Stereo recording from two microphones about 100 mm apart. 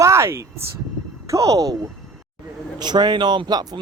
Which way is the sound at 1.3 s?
35° right (ahead or behind).